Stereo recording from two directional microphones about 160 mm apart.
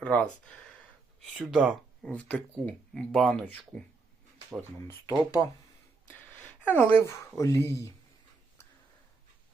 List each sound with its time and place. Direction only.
0.0 s speech: 10° left (ahead or behind)
1.4 s speech: centre (ahead or behind)
4.9 s speech: 15° left (ahead or behind)
6.7 s speech: 10° left (ahead or behind)